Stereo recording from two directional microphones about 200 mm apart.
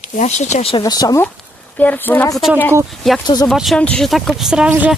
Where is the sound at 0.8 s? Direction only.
20° left (ahead or behind); by 4.9 s 5° right (ahead or behind).